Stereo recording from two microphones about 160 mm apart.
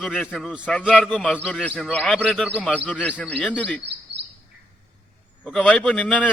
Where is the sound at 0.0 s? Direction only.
5° left (ahead or behind).